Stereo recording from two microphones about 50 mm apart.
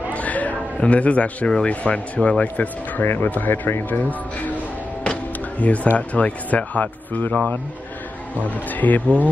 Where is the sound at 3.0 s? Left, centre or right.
Left.